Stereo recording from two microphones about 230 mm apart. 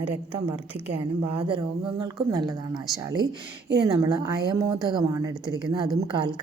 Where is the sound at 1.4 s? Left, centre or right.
Centre.